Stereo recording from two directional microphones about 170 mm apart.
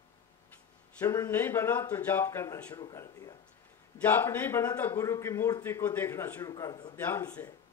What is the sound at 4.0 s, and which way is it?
A man's voice, 10° left (ahead or behind).